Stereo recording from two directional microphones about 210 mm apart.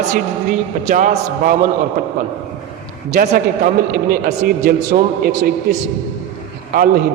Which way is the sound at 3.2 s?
45° right (ahead or behind).